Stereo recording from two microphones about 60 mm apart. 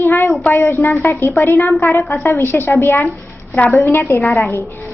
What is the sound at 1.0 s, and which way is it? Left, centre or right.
A woman's voice, left.